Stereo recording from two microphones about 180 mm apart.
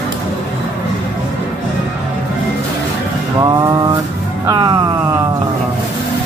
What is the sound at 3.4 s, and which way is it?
Speech, 20° right (ahead or behind).